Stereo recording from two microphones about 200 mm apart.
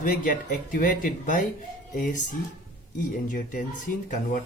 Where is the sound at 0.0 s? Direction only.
45° left (ahead or behind).